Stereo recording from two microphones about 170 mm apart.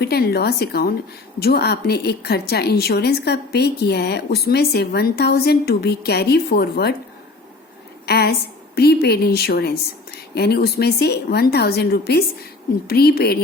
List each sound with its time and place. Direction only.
0.0 s a woman's voice: 70° left (ahead or behind)
8.0 s a woman's voice: 70° left (ahead or behind)